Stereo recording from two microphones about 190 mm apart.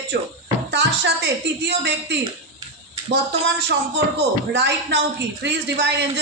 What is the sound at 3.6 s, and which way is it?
A woman's voice, 60° right (ahead or behind).